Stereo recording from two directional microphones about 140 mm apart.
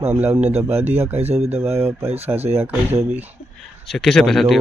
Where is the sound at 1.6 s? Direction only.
15° right (ahead or behind).